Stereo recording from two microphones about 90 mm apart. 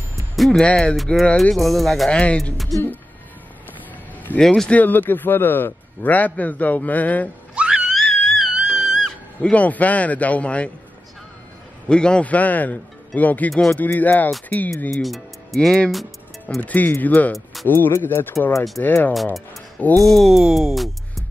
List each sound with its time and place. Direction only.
0.4 s a man's voice: 10° left (ahead or behind)
2.0 s a man's voice: 10° left (ahead or behind)
2.5 s speech: centre (ahead or behind)
4.4 s a man's voice: 10° left (ahead or behind)
7.5 s a sound: 10° right (ahead or behind)
7.9 s music: centre (ahead or behind)
8.5 s music: 10° right (ahead or behind)
9.4 s a man's voice: 15° left (ahead or behind)
11.9 s a man's voice: 10° left (ahead or behind)
13.5 s speech: 5° left (ahead or behind)
13.7 s speech: 20° left (ahead or behind)
14.9 s speech: centre (ahead or behind)
16.6 s a man's voice: 20° left (ahead or behind)
20.0 s speech: centre (ahead or behind)